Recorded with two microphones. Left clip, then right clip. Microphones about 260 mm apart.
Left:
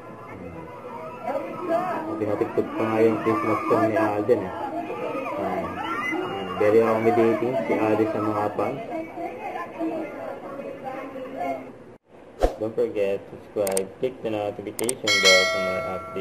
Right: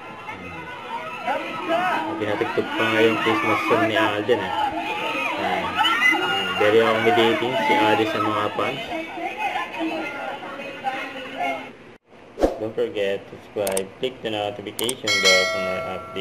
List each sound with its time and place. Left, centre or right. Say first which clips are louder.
1.2 s chatter: right 2 dB; centre
10.9 s a sound: right 5 dB; centre
12.4 s speech: right 2 dB; centre